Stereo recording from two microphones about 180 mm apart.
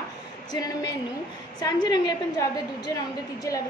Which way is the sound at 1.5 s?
25° left (ahead or behind).